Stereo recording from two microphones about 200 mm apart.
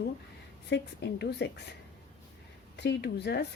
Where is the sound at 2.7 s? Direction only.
60° left (ahead or behind).